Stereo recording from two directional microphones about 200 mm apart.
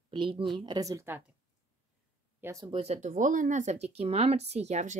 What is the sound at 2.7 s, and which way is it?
Speech, 35° right (ahead or behind).